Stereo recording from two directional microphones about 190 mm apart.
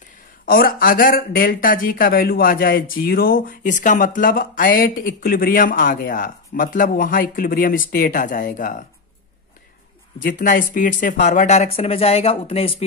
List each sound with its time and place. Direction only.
0.5 s speech: 50° left (ahead or behind)
10.1 s speech: 45° left (ahead or behind)